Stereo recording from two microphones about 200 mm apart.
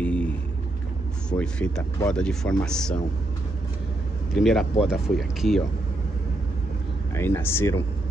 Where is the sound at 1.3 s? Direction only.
55° left (ahead or behind).